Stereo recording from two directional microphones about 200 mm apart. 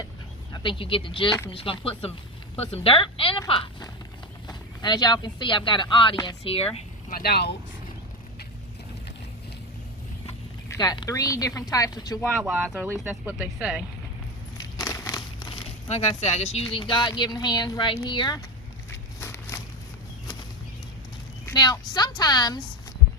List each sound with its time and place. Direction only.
0.5 s speech: 25° left (ahead or behind)
7.1 s speech: 50° left (ahead or behind)
10.7 s speech: 20° left (ahead or behind)
12.2 s speech: 5° right (ahead or behind)
14.6 s speech: 20° left (ahead or behind)
21.4 s speech: 20° left (ahead or behind)